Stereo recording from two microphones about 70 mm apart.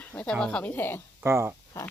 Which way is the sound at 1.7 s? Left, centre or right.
Left.